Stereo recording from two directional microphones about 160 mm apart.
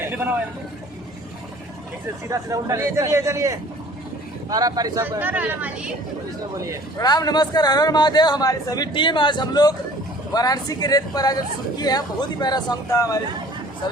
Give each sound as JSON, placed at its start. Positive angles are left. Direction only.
{"t": 0.0, "sound": "vehicle", "side_deg": -15}
{"t": 2.3, "sound": "speech", "side_deg": -20}
{"t": 5.2, "sound": "speech", "side_deg": -10}
{"t": 7.0, "sound": "a man's voice", "side_deg": 25}